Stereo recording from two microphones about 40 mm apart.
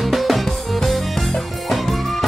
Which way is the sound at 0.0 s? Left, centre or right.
Centre.